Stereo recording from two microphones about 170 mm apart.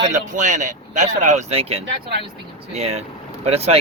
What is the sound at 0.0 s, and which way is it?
Speech, 45° right (ahead or behind).